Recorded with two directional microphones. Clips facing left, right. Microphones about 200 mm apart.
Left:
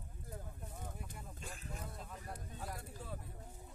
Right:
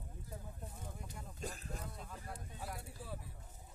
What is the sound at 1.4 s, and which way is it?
Vehicle, 40° right (ahead or behind).